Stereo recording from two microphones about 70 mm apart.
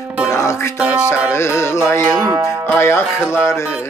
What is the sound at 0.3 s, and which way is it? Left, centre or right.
Music, left.